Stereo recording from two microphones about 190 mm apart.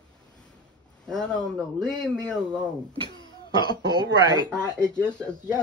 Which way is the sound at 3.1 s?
20° left (ahead or behind).